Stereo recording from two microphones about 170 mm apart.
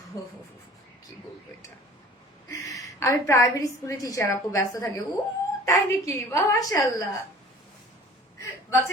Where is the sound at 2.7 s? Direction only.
15° left (ahead or behind).